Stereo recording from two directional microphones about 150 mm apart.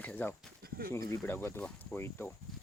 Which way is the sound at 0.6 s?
90° right.